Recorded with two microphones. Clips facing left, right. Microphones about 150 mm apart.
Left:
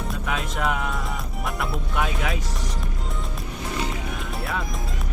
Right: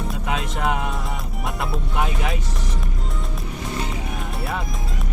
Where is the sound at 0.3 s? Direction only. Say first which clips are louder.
Right 2 dB; 25° right (ahead or behind).